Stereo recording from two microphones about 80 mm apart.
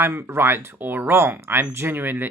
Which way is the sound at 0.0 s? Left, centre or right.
Right.